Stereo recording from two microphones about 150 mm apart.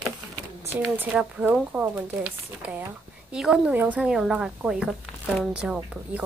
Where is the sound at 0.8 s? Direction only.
10° right (ahead or behind).